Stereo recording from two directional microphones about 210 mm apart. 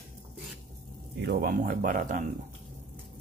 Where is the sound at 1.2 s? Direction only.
45° right (ahead or behind).